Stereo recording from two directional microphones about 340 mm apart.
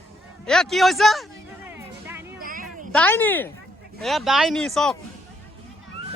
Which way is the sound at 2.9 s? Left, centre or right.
Centre.